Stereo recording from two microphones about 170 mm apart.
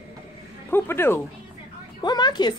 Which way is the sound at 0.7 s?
15° left (ahead or behind).